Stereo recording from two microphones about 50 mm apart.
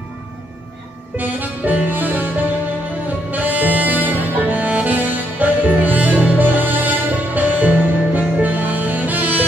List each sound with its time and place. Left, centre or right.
1.1 s music: right